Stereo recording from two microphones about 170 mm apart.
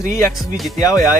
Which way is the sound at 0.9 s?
20° left (ahead or behind).